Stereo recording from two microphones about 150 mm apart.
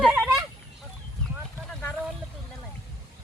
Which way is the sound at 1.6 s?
10° left (ahead or behind).